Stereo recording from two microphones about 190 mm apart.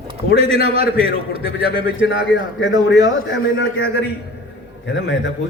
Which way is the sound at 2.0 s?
70° left (ahead or behind).